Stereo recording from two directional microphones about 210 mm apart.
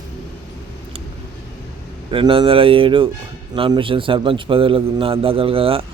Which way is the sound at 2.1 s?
25° right (ahead or behind).